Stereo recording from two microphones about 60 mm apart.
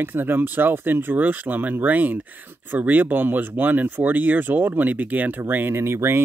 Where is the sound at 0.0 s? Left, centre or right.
Right.